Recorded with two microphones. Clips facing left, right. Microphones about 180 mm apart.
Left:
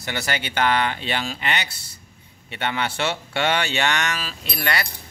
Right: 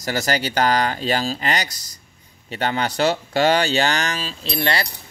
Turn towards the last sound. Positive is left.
turn(degrees=-30)  # may be behind; listen again after turning